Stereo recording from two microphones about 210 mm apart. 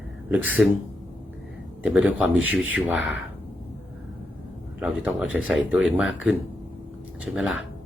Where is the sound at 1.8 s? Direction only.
5° right (ahead or behind).